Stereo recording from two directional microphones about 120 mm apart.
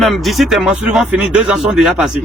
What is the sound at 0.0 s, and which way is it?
Speech, centre (ahead or behind).